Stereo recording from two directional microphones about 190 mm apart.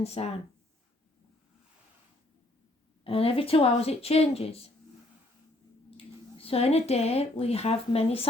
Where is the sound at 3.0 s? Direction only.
30° left (ahead or behind).